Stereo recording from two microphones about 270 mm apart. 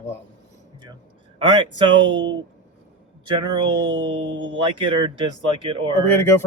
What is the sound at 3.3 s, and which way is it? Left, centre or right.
Speech, centre.